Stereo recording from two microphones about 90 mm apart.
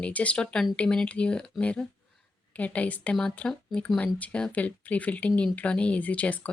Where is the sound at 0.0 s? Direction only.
15° left (ahead or behind).